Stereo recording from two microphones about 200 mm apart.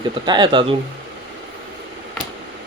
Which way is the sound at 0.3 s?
25° right (ahead or behind).